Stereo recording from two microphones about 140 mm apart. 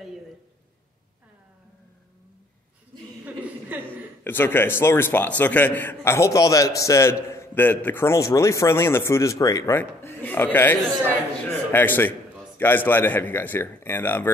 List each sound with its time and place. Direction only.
3.7 s chuckle: 10° right (ahead or behind)
4.2 s a man's voice: 15° left (ahead or behind)